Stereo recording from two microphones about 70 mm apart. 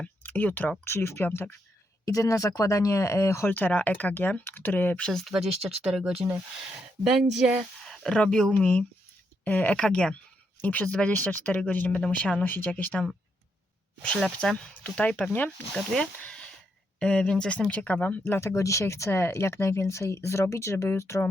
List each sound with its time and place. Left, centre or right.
0.2 s speech: left
0.9 s speech: left
2.0 s speech: left
3.5 s speech: left
4.9 s speech: centre
5.2 s speech: centre
5.8 s speech: centre
7.9 s a sound: centre
8.2 s speech: centre
9.4 s speech: left
9.7 s speech: centre
10.6 s speech: left
14.0 s speech: centre
18.3 s speech: left